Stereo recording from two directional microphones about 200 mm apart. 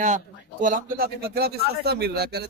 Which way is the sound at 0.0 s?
40° right (ahead or behind).